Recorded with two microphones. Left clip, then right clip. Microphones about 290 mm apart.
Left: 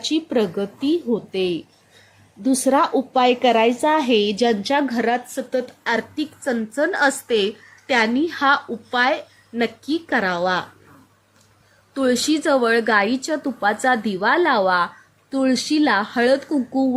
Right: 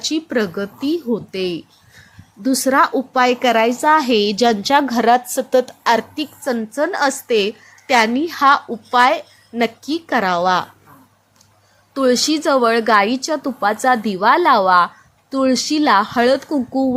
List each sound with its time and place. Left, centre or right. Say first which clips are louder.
0.3 s a woman's voice: right 1 dB; centre
0.8 s speech: even; right
1.1 s a woman's voice: even; centre
11.9 s a woman's voice: right 4 dB; centre